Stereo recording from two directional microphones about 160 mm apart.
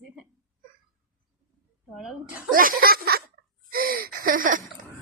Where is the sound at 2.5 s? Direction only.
60° right (ahead or behind).